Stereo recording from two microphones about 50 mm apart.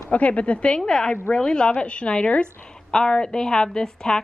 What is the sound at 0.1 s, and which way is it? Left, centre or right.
A woman's voice, left.